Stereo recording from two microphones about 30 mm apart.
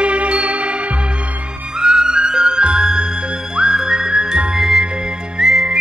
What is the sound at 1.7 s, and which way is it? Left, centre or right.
Music, right.